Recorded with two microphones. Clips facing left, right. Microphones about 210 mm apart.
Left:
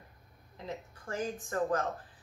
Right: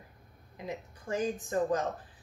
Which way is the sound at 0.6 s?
15° right (ahead or behind).